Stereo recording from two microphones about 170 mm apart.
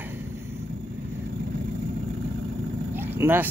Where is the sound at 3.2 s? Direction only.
10° right (ahead or behind).